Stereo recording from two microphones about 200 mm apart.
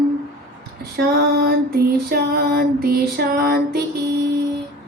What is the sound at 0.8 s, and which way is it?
Female singing, 50° right (ahead or behind).